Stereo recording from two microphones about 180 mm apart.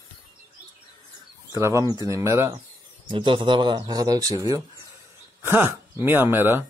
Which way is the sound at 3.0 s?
30° right (ahead or behind).